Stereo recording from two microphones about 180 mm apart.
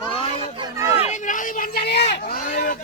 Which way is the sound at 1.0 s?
40° left (ahead or behind).